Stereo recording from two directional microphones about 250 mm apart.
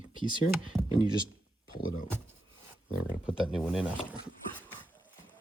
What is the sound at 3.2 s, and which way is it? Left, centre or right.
Speech, centre.